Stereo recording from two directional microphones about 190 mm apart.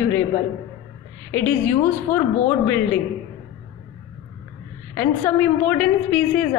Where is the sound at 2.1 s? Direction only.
10° left (ahead or behind).